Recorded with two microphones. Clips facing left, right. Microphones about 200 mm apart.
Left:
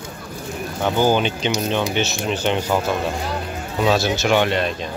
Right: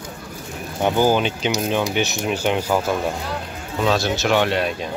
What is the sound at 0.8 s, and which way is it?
Speech, 5° right (ahead or behind).